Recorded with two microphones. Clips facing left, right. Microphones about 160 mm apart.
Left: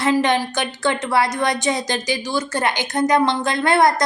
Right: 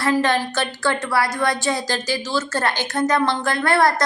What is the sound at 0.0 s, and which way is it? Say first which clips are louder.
A woman's voice: left 1 dB; 20° left (ahead or behind).